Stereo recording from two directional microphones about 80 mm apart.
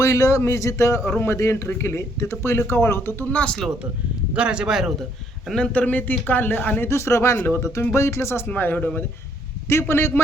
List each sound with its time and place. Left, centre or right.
0.0 s speech: left; by 3.7 s centre
4.4 s speech: centre
5.5 s speech: centre; by 10.1 s left